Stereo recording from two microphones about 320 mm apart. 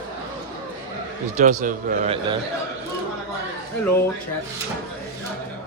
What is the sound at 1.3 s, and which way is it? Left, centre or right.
A man's voice, right.